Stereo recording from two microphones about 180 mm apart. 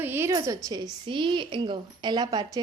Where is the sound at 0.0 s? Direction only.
10° right (ahead or behind).